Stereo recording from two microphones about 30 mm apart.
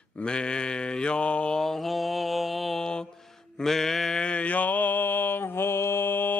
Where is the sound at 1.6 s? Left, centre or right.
Centre.